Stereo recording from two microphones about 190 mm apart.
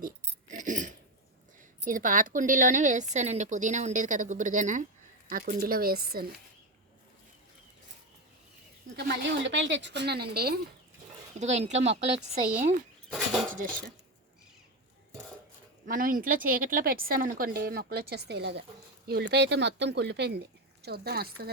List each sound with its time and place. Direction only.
0.0 s a sound: 40° right (ahead or behind)
1.8 s a woman's voice: 45° right (ahead or behind)
9.0 s speech: 65° right (ahead or behind)
11.3 s a woman's voice: 35° right (ahead or behind)
15.9 s a woman's voice: 45° right (ahead or behind)